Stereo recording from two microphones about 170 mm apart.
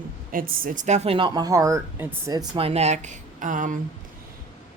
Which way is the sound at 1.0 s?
30° right (ahead or behind).